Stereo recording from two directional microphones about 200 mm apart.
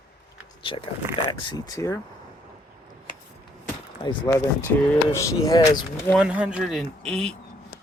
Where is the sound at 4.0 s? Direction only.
20° left (ahead or behind).